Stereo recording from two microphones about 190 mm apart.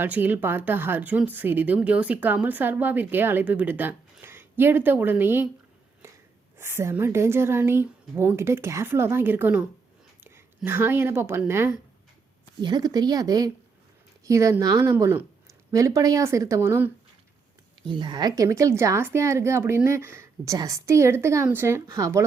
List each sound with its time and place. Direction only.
0.0 s speech: 10° right (ahead or behind)
6.6 s speech: 15° right (ahead or behind)
17.8 s speech: 25° right (ahead or behind)